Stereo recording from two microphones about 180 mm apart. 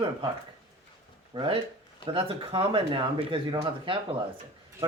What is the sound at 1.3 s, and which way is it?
Speech, 30° right (ahead or behind).